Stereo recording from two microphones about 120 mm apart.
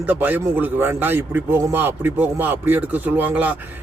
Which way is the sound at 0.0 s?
15° right (ahead or behind).